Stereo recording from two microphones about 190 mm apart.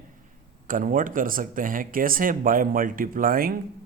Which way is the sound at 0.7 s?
45° right (ahead or behind).